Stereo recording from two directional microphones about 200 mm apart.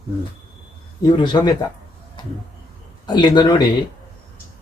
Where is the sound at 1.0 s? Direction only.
20° left (ahead or behind).